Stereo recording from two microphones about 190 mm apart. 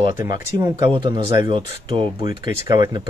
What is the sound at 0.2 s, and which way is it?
Speech, 20° right (ahead or behind).